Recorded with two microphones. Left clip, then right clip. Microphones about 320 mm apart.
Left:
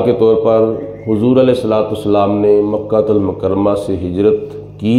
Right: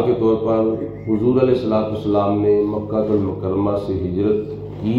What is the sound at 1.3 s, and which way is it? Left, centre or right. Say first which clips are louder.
Speech: left 5 dB; left.